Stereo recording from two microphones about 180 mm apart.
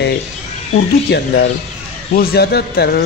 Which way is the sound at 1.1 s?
65° left (ahead or behind).